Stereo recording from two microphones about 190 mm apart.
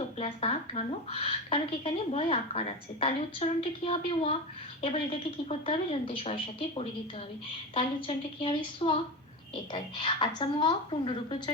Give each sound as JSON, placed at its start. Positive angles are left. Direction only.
{"t": 0.2, "sound": "a woman's voice", "side_deg": 30}